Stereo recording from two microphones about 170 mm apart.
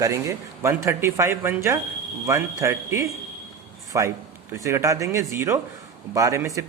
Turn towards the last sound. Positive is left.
turn(degrees=-20)  # may be behind; listen again after turning